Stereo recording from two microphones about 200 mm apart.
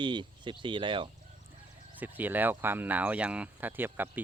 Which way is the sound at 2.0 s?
10° right (ahead or behind).